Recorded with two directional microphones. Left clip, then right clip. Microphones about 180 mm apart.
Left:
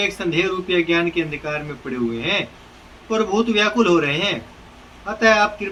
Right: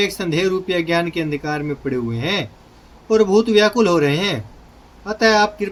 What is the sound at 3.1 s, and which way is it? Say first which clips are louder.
Speech: right 5 dB; 85° right.